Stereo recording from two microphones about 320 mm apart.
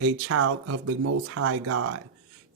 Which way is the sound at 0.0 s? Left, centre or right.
Right.